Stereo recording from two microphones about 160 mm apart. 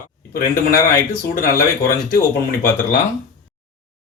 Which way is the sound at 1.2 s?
65° left (ahead or behind).